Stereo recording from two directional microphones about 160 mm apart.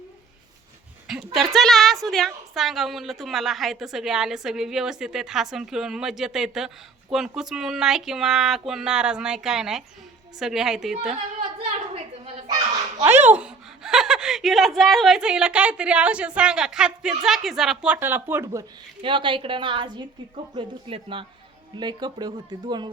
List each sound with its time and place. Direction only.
1.0 s a woman's voice: centre (ahead or behind)
13.1 s a woman's voice: 10° right (ahead or behind)
19.0 s a woman's voice: 30° right (ahead or behind)